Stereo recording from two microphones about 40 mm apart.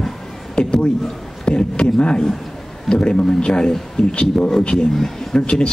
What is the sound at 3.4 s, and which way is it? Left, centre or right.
A man's voice, centre.